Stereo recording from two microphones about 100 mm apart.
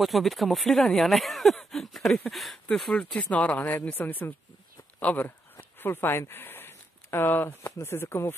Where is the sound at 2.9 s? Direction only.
15° left (ahead or behind).